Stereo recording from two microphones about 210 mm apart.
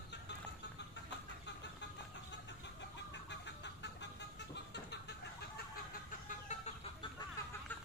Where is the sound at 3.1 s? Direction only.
55° left (ahead or behind).